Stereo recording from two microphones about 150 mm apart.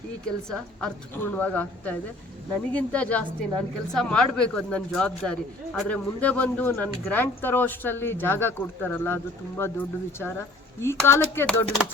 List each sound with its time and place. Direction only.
0.8 s speech: 10° left (ahead or behind)